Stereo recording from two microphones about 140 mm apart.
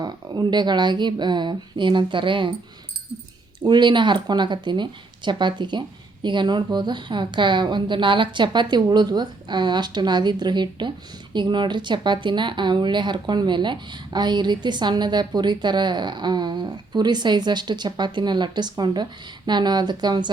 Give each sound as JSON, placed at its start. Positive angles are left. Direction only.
{"t": 0.0, "sound": "speech", "side_deg": -30}
{"t": 3.6, "sound": "speech", "side_deg": -35}